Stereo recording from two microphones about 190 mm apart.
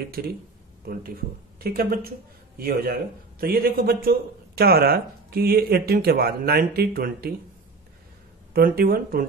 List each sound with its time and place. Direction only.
0.2 s speech: 55° right (ahead or behind)
8.5 s speech: 50° right (ahead or behind)